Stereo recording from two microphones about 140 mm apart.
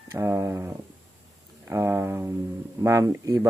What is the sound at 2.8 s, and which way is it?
Speech, 20° right (ahead or behind).